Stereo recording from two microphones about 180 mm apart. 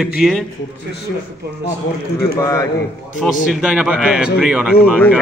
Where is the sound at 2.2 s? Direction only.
15° left (ahead or behind).